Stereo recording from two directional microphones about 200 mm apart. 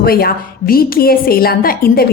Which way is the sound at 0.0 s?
50° left (ahead or behind).